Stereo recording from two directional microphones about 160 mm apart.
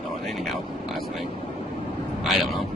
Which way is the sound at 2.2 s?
Centre (ahead or behind).